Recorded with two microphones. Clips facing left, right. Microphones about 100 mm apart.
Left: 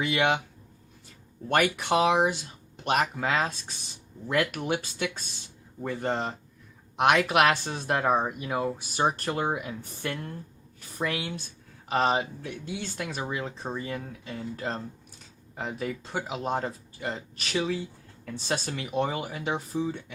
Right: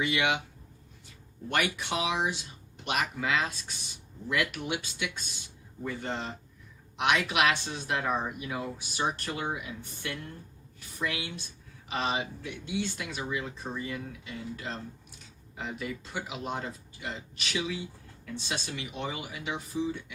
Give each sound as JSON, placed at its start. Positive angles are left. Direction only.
{"t": 0.0, "sound": "speech", "side_deg": 40}
{"t": 1.5, "sound": "a woman's voice", "side_deg": 50}